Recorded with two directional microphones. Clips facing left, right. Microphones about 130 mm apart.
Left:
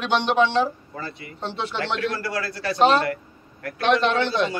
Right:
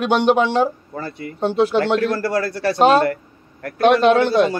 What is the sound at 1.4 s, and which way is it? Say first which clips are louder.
Speech: right 11 dB; 45° right (ahead or behind).